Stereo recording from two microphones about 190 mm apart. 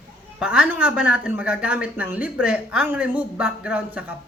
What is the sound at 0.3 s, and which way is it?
A man's voice, 5° right (ahead or behind).